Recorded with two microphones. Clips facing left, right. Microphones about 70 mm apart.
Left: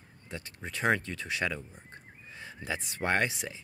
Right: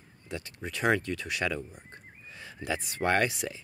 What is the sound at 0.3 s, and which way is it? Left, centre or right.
Speech, left.